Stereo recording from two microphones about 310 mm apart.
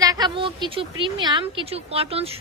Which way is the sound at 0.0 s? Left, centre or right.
Centre.